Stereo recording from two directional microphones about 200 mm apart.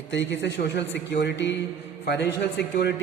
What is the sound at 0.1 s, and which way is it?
A man's voice, 65° left (ahead or behind).